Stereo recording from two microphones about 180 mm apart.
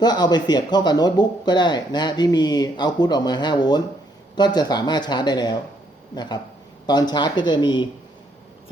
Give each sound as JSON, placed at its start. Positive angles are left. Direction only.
{"t": 0.0, "sound": "speech", "side_deg": 25}